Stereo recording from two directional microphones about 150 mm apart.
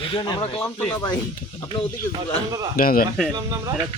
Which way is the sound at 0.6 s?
10° left (ahead or behind).